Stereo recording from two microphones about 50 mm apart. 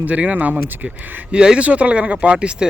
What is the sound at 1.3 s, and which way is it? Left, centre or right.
Speech, centre.